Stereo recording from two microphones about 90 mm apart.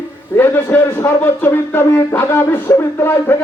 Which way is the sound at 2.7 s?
25° left (ahead or behind).